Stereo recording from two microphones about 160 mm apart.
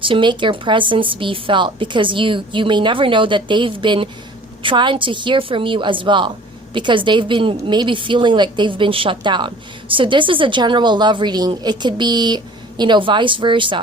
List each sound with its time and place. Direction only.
0.0 s a woman's voice: 30° right (ahead or behind)